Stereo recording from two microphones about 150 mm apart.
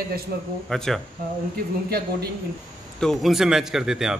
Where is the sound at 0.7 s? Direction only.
Centre (ahead or behind).